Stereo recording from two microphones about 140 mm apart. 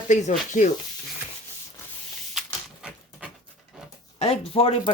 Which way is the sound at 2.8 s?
5° right (ahead or behind).